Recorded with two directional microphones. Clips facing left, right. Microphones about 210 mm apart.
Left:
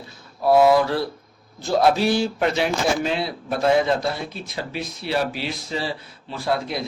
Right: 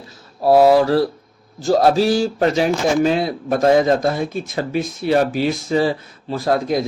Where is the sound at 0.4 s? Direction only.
35° right (ahead or behind).